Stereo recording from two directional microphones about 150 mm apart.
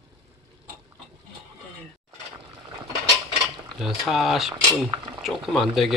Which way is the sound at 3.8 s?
Centre (ahead or behind).